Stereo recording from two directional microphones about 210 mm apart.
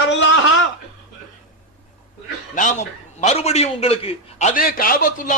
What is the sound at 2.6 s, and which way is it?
A man's voice, 35° left (ahead or behind).